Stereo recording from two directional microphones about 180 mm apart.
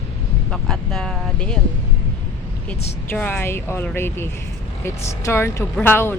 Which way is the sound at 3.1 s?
10° left (ahead or behind).